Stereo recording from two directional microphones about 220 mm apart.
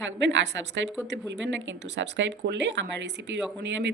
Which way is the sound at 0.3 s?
55° right (ahead or behind).